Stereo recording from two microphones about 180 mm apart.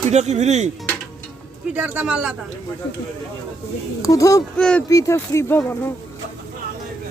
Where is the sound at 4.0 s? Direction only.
15° left (ahead or behind).